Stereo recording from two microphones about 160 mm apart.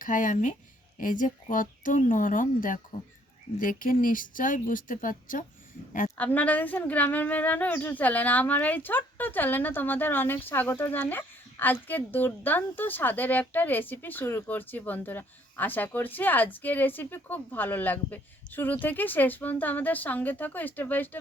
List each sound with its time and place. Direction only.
0.0 s speech: 55° left (ahead or behind)
6.1 s a woman's voice: 10° left (ahead or behind)